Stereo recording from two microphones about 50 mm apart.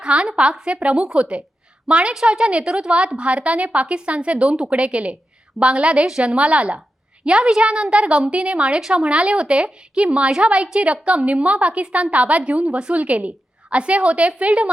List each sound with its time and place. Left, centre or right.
0.0 s a woman's voice: centre